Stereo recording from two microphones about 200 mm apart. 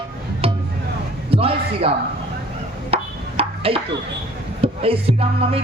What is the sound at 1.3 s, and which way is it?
Speech, 30° right (ahead or behind).